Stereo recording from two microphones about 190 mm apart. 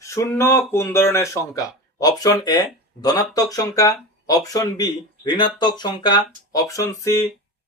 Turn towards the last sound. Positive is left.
turn(degrees=15)  # may be behind; listen again after turning